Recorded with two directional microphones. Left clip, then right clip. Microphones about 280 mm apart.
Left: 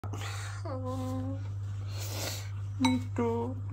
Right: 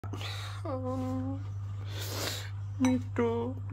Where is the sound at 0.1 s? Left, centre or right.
Centre.